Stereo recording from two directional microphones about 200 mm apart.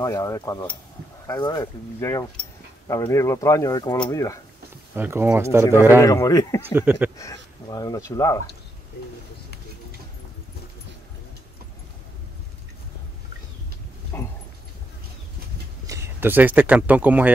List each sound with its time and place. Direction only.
0.0 s speech: 15° left (ahead or behind)
4.9 s speech: 10° right (ahead or behind)
5.9 s speech: 15° left (ahead or behind)
6.7 s speech: 10° right (ahead or behind)
7.2 s speech: 20° left (ahead or behind)
14.1 s speech: 10° left (ahead or behind)
15.9 s speech: 10° right (ahead or behind)